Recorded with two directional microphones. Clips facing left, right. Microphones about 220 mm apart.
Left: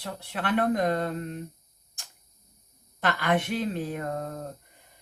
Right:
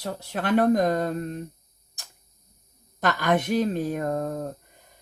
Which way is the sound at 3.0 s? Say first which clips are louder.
Right 3 dB; 40° right (ahead or behind).